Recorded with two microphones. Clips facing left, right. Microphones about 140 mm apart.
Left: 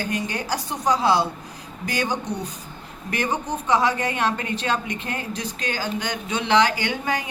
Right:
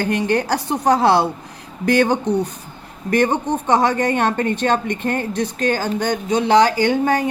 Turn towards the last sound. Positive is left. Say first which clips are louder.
# right 9 dB
turn(degrees=-50)  # may be behind; listen again after turning